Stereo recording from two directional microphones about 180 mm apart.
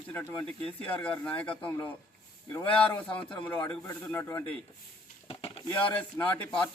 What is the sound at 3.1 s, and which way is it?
Speech, 10° left (ahead or behind).